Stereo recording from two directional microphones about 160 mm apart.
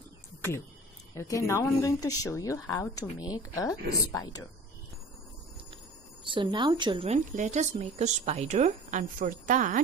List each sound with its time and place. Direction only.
1.1 s speech: 20° left (ahead or behind)
6.2 s a woman's voice: 30° right (ahead or behind)
7.1 s speech: 50° right (ahead or behind)